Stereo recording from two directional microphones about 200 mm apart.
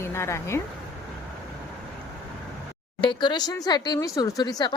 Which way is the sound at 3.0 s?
20° left (ahead or behind).